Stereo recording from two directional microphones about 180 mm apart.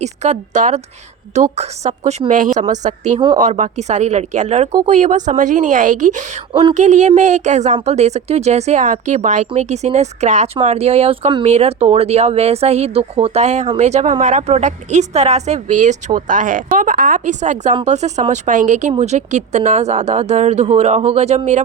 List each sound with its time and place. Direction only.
0.0 s speech: 40° right (ahead or behind)
3.2 s speech: 25° right (ahead or behind)
3.4 s speech: 40° right (ahead or behind)
6.5 s speech: 30° right (ahead or behind)
6.7 s speech: 40° right (ahead or behind)